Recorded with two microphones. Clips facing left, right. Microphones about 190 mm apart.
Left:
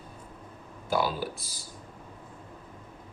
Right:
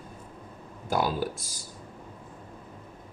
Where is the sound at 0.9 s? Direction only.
50° right (ahead or behind).